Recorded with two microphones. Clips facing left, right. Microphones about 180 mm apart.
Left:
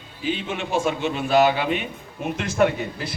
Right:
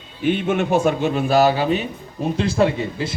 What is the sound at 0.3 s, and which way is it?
Speech, 55° right (ahead or behind).